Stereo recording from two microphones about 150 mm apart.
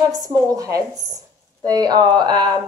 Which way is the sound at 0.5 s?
25° right (ahead or behind).